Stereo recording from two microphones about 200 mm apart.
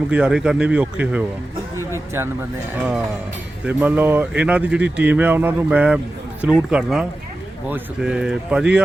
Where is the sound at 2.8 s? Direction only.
5° right (ahead or behind).